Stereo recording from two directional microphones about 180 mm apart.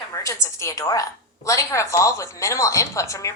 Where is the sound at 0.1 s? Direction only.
15° left (ahead or behind).